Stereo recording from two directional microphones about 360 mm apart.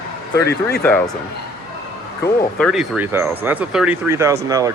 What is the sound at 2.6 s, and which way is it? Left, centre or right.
Speech, centre.